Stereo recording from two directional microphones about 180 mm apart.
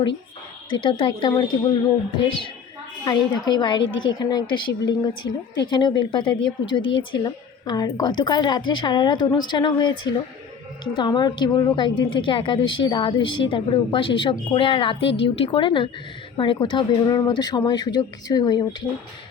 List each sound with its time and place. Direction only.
0.7 s a woman's voice: 25° left (ahead or behind)
3.0 s a woman's voice: 20° left (ahead or behind)